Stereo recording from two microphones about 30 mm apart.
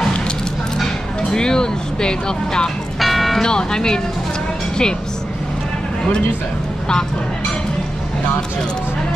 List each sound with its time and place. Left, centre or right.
1.3 s speech: left
3.0 s music: centre
3.4 s speech: left